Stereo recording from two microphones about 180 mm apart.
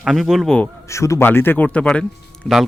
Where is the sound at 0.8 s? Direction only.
15° left (ahead or behind); by 2.6 s centre (ahead or behind).